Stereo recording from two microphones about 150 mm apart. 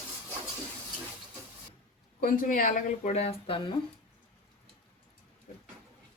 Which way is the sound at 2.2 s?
65° left (ahead or behind).